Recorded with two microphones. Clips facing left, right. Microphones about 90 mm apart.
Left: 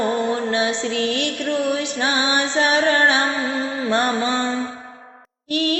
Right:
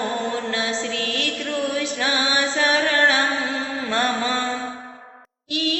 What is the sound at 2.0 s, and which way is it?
Music, 20° left (ahead or behind).